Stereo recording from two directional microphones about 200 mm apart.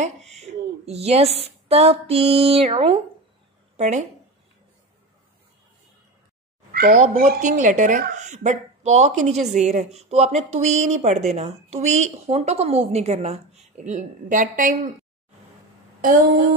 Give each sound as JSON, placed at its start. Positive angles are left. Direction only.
{"t": 0.0, "sound": "a sound", "side_deg": -35}
{"t": 3.7, "sound": "speech", "side_deg": -35}
{"t": 6.7, "sound": "speech", "side_deg": -45}